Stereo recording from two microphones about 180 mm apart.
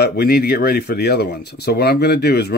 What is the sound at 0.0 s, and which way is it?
Speech, 60° left (ahead or behind).